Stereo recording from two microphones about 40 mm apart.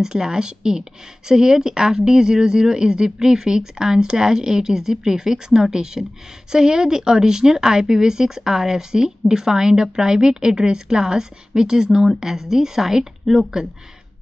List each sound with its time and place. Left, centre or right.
0.0 s speech: centre